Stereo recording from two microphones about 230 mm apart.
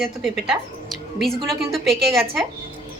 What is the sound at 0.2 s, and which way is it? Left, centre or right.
A woman's voice, centre.